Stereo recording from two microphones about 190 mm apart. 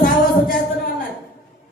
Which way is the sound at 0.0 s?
45° left (ahead or behind).